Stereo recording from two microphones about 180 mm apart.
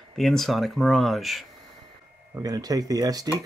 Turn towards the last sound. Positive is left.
turn(degrees=-20)  # may be behind; listen again after turning